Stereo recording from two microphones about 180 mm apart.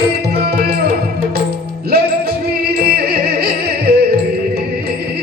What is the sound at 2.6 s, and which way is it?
Music, 60° right (ahead or behind).